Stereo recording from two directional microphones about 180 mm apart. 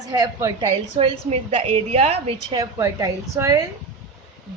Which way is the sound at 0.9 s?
35° right (ahead or behind).